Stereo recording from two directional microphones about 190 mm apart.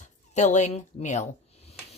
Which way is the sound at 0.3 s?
40° left (ahead or behind).